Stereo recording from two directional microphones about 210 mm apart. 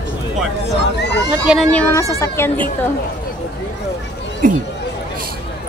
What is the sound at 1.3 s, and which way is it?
Speech, 5° right (ahead or behind).